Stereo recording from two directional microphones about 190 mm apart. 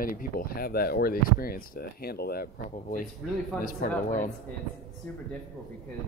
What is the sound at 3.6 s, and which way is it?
Speech, 45° left (ahead or behind).